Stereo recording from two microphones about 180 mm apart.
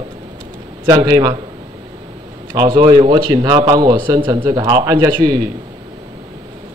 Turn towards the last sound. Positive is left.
turn(degrees=-25)  # may be behind; listen again after turning